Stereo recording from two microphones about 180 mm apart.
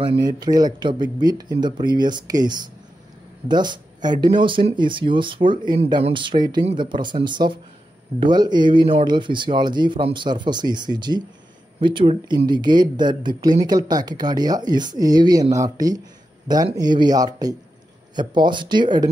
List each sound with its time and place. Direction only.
0.2 s speech: 20° right (ahead or behind)